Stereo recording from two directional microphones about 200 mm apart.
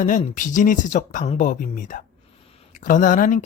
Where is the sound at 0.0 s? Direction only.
40° left (ahead or behind).